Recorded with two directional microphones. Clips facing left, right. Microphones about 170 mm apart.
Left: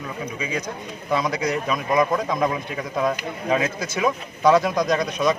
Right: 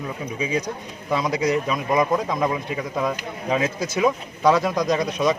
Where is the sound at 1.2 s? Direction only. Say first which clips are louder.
Right 2 dB; 10° right (ahead or behind).